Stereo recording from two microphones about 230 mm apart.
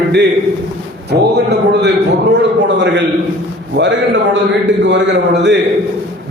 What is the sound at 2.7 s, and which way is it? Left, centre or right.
A man's voice, right.